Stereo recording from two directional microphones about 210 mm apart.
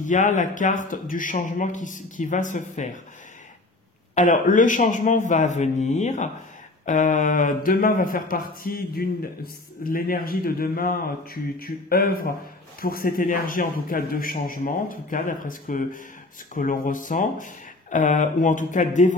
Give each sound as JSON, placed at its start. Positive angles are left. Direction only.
{"t": 0.0, "sound": "a man's voice", "side_deg": 35}
{"t": 4.1, "sound": "a man's voice", "side_deg": 35}